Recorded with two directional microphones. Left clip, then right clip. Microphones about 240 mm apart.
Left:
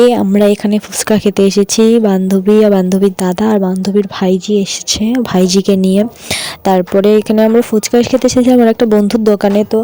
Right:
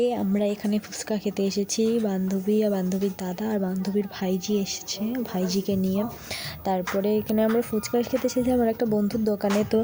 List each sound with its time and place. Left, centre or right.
0.0 s speech: left